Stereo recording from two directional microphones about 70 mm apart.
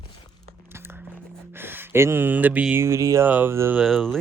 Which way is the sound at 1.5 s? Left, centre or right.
Right.